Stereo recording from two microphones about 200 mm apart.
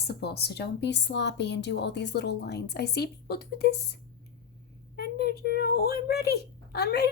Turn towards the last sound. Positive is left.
turn(degrees=55)  # may be behind; listen again after turning